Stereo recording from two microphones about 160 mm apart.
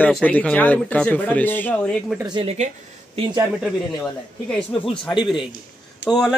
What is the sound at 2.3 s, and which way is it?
Speech, 40° right (ahead or behind).